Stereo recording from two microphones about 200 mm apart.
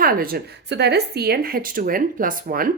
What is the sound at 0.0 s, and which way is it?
Speech, 45° right (ahead or behind).